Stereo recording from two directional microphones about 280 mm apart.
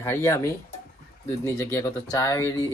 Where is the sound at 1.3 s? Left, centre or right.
Centre.